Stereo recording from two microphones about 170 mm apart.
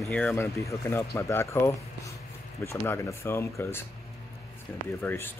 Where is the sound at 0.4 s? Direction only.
15° left (ahead or behind).